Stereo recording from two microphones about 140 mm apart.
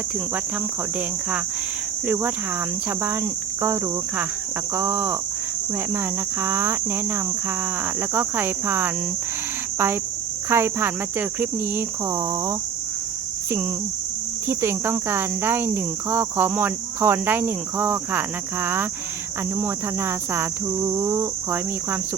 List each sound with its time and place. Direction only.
4.7 s speech: 15° right (ahead or behind)
6.4 s speech: 15° right (ahead or behind)
14.4 s speech: 15° right (ahead or behind)